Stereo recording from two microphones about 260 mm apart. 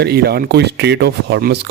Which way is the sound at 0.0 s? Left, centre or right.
Right.